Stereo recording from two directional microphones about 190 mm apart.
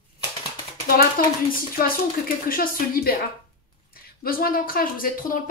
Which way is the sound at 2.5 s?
50° left (ahead or behind).